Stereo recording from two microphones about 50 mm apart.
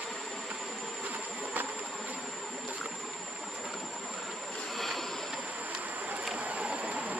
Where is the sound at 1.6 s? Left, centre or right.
Right.